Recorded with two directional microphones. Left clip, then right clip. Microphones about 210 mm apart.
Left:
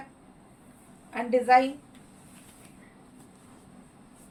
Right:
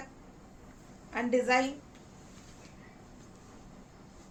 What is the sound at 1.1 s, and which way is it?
Speech, 20° right (ahead or behind).